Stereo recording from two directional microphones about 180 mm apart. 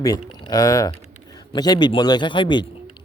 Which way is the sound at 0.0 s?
20° left (ahead or behind).